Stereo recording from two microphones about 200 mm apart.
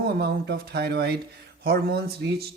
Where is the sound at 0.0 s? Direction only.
55° right (ahead or behind).